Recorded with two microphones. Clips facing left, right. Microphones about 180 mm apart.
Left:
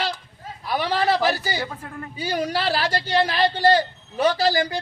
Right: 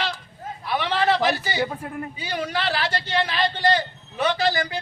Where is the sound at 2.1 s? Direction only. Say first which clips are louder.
Left 5 dB; 40° left (ahead or behind).